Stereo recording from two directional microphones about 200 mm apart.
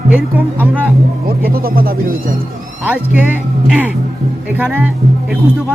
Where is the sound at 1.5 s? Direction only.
45° right (ahead or behind).